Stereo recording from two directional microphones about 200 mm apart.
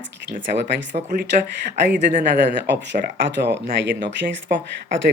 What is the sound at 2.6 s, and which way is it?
Speech, 60° right (ahead or behind).